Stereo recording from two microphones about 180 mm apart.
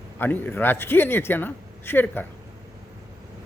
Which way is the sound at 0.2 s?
10° left (ahead or behind).